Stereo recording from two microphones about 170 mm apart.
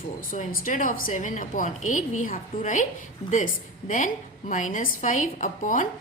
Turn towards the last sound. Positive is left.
turn(degrees=50)  # may be behind; listen again after turning